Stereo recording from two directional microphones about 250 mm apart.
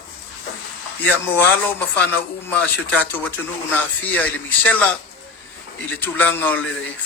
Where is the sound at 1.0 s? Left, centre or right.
Centre.